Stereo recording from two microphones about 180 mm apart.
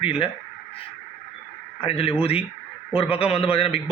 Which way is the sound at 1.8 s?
30° left (ahead or behind).